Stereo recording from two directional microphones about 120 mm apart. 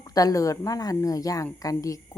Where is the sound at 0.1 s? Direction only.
30° left (ahead or behind).